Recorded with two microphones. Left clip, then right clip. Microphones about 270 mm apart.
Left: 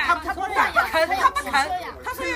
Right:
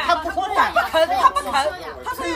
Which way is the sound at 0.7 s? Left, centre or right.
Centre.